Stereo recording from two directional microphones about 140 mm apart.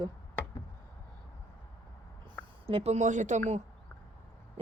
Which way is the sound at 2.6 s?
45° right (ahead or behind).